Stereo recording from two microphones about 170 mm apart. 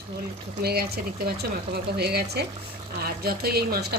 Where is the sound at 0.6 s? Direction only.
65° right (ahead or behind).